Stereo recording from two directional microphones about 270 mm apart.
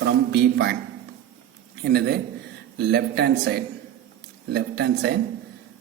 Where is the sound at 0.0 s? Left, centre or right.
Right.